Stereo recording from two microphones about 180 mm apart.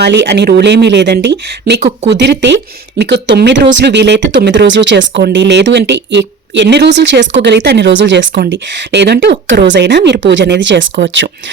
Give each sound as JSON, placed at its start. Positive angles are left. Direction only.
{"t": 0.0, "sound": "speech", "side_deg": -70}